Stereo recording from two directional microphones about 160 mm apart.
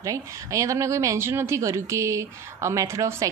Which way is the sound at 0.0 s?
20° right (ahead or behind).